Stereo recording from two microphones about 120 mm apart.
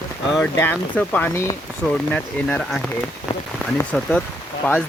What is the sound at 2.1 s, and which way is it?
Speech, 10° left (ahead or behind).